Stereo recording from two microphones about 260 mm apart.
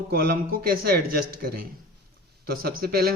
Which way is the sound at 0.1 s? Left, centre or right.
Right.